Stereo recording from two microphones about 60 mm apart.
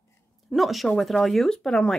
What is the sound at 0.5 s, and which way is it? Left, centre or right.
A woman's voice, centre.